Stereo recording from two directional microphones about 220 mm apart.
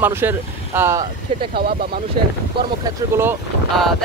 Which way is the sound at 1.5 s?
45° right (ahead or behind).